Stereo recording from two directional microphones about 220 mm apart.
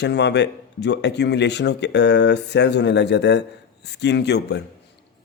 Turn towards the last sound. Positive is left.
turn(degrees=50)  # may be behind; listen again after turning